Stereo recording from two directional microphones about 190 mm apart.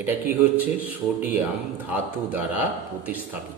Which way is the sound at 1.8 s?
10° right (ahead or behind).